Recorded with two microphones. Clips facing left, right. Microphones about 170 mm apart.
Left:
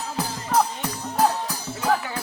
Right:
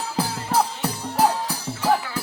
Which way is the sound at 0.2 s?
30° right (ahead or behind).